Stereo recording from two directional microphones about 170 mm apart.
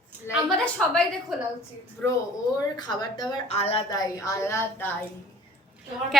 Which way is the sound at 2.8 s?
25° left (ahead or behind).